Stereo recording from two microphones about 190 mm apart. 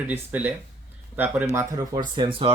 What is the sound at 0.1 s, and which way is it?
Speech, 10° right (ahead or behind).